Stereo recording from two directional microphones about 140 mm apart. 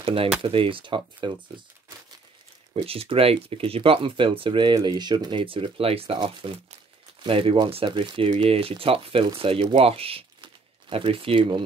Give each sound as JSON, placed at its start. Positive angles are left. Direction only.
{"t": 0.0, "sound": "speech", "side_deg": -40}
{"t": 2.7, "sound": "speech", "side_deg": -40}